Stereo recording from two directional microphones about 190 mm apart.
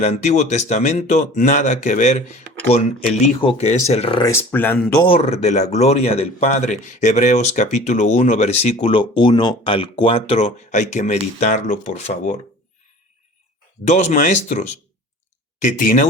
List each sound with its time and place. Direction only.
0.0 s speech: 35° left (ahead or behind)
4.2 s speech: 15° left (ahead or behind)
5.0 s speech: 30° left (ahead or behind)
13.8 s speech: 35° left (ahead or behind)
15.6 s speech: 45° left (ahead or behind)